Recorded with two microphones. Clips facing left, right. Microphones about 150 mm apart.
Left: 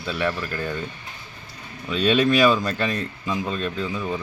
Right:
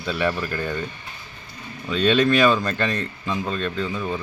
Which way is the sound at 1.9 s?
5° left (ahead or behind).